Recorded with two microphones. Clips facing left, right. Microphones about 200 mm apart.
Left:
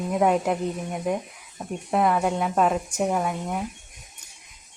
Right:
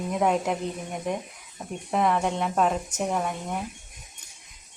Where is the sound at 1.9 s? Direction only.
5° left (ahead or behind).